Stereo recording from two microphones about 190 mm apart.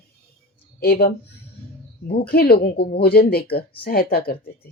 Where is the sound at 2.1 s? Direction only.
55° left (ahead or behind).